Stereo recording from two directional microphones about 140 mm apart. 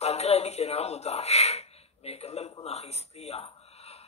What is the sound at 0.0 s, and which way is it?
A man's voice, 50° left (ahead or behind).